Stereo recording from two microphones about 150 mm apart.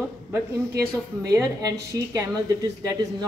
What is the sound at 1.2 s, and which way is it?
Speech, 25° right (ahead or behind).